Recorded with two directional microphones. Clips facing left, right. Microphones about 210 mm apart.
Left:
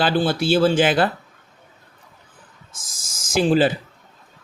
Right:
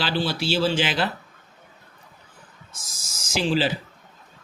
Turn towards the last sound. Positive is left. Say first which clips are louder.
# left 6 dB
turn(degrees=50)  # may be behind; listen again after turning